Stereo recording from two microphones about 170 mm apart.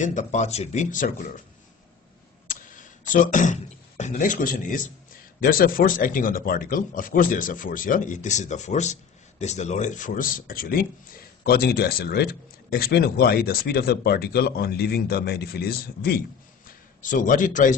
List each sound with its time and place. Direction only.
0.0 s speech: 45° left (ahead or behind)
2.5 s speech: 50° left (ahead or behind); by 16.2 s 65° left (ahead or behind)
16.6 s a man's voice: 50° left (ahead or behind)